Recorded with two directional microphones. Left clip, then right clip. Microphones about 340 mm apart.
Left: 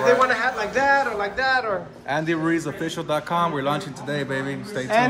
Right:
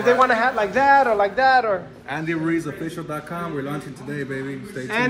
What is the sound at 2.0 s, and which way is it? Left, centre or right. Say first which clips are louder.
Speech: left 4 dB; left.